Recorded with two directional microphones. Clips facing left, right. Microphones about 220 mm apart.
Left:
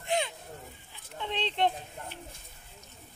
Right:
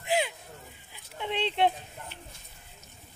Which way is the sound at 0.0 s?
5° right (ahead or behind).